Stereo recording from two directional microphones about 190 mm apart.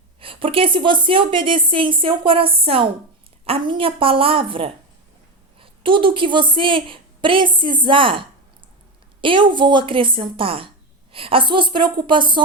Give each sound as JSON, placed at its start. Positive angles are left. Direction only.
{"t": 0.2, "sound": "a woman's voice", "side_deg": -30}
{"t": 9.2, "sound": "a woman's voice", "side_deg": -25}